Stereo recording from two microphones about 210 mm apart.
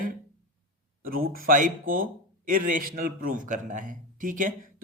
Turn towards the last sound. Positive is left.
turn(degrees=-40)  # may be behind; listen again after turning